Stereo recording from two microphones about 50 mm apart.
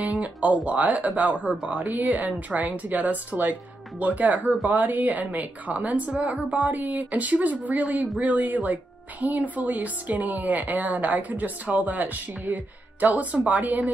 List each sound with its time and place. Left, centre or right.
0.0 s speech: right
4.4 s speech: centre
4.6 s speech: right